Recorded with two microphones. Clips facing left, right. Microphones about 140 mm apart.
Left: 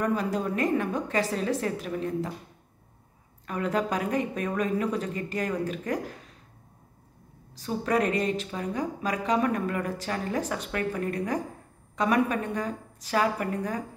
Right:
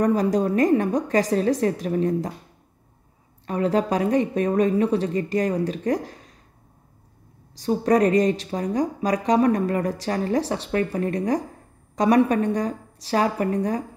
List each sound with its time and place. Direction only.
0.0 s a woman's voice: 40° right (ahead or behind)
3.4 s a woman's voice: 35° right (ahead or behind)
7.5 s a woman's voice: 35° right (ahead or behind)